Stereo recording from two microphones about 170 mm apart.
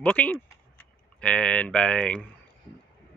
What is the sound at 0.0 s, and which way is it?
A man's voice, 5° left (ahead or behind).